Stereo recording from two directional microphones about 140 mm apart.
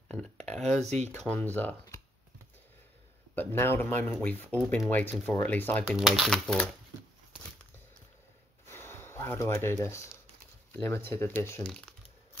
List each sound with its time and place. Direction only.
0.1 s speech: 5° left (ahead or behind)
0.8 s speech: 55° right (ahead or behind)
1.2 s speech: 10° left (ahead or behind)
3.3 s speech: 15° left (ahead or behind)
5.9 s speech: centre (ahead or behind)
8.6 s a sound: 15° left (ahead or behind)
10.7 s speech: 15° left (ahead or behind)